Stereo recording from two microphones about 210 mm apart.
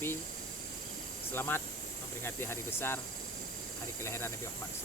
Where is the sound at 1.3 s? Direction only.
10° left (ahead or behind).